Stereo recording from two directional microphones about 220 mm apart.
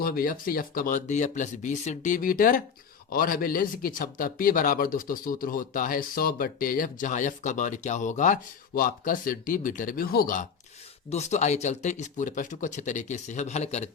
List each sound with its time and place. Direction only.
0.0 s a man's voice: 40° left (ahead or behind)